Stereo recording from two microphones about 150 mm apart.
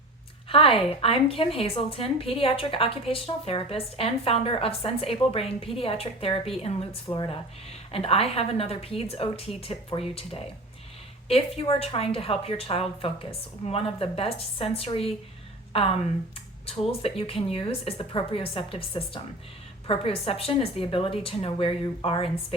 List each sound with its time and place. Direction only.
0.4 s a woman's voice: 40° left (ahead or behind)